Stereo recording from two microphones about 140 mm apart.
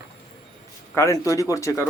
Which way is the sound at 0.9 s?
20° left (ahead or behind).